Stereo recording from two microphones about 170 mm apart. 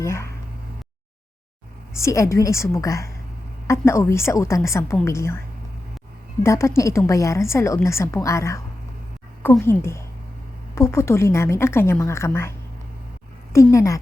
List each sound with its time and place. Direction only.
0.0 s speech: 15° left (ahead or behind)
2.0 s a woman's voice: 15° left (ahead or behind)
6.4 s a woman's voice: 15° left (ahead or behind)
13.7 s a woman's voice: 20° left (ahead or behind)